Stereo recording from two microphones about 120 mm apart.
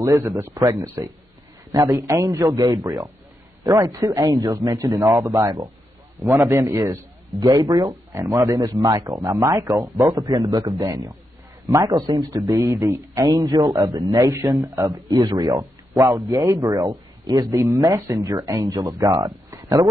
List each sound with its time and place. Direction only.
0.0 s a man's voice: 30° right (ahead or behind)
2.4 s a man's voice: 35° right (ahead or behind)